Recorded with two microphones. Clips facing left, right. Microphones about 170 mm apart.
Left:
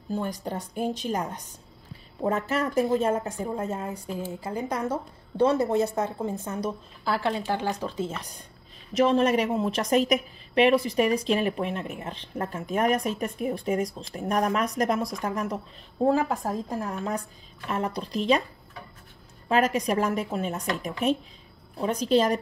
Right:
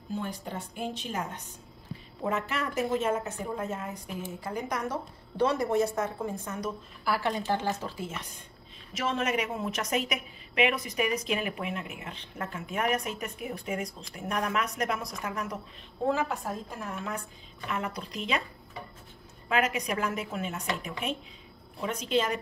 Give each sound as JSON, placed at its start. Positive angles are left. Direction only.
{"t": 0.1, "sound": "a woman's voice", "side_deg": 40}
{"t": 2.7, "sound": "a woman's voice", "side_deg": 30}
{"t": 8.1, "sound": "speech", "side_deg": 35}
{"t": 19.5, "sound": "speech", "side_deg": 35}